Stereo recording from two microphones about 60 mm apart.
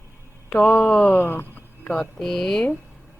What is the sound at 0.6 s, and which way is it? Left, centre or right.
Speech, left.